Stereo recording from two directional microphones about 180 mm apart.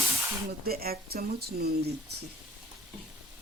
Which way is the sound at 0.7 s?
60° right (ahead or behind).